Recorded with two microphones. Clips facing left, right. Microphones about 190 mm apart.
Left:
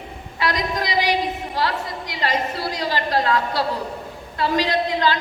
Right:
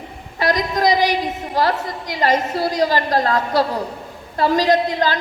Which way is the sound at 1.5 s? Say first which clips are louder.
Right 7 dB; 45° right (ahead or behind).